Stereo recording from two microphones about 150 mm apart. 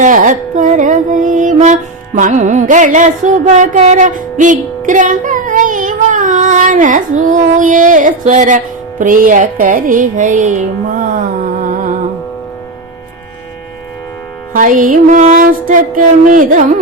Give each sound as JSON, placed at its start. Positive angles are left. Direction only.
{"t": 0.0, "sound": "music", "side_deg": -60}
{"t": 11.6, "sound": "music", "side_deg": -65}
{"t": 14.5, "sound": "music", "side_deg": -60}